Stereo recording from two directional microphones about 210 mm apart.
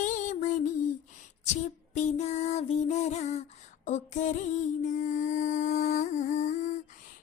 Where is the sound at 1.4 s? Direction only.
35° left (ahead or behind).